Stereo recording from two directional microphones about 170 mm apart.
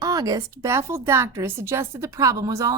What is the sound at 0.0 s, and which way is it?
A woman's voice, 20° right (ahead or behind).